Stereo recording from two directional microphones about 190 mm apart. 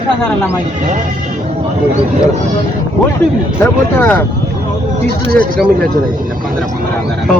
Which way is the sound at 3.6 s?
10° left (ahead or behind).